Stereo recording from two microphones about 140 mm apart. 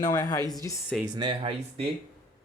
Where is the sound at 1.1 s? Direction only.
35° right (ahead or behind).